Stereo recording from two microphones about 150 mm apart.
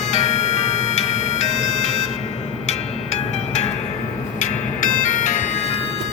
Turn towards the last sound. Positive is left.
turn(degrees=60)  # may be behind; listen again after turning